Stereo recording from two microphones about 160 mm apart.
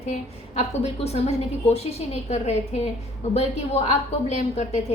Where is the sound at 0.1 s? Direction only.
40° left (ahead or behind).